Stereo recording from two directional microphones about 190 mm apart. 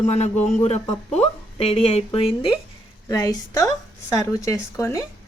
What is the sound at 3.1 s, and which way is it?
Speech, 15° left (ahead or behind).